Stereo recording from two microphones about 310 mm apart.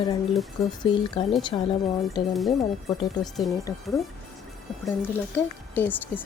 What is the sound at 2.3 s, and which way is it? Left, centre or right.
Speech, centre.